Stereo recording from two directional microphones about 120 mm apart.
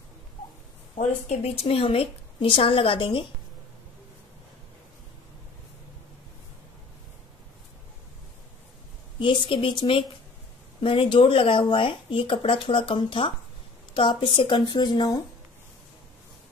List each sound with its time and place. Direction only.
0.9 s speech: 65° left (ahead or behind); by 3.3 s 45° left (ahead or behind)
9.2 s a woman's voice: 45° left (ahead or behind)